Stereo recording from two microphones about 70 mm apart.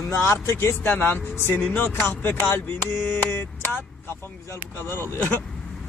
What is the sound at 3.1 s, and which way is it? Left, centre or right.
Mantra, left.